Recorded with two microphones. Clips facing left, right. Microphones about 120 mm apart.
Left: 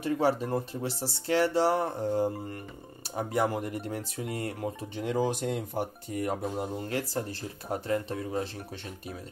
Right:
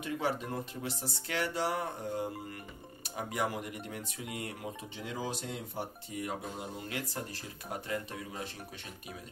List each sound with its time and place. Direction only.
0.0 s speech: 35° left (ahead or behind)
5.0 s speech: 55° left (ahead or behind); by 8.5 s 35° left (ahead or behind)